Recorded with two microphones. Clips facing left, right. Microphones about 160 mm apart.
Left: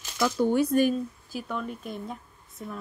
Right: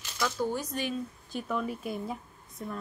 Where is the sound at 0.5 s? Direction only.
55° left (ahead or behind).